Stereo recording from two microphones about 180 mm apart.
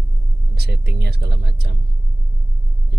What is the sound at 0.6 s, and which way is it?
Speech, 65° right (ahead or behind).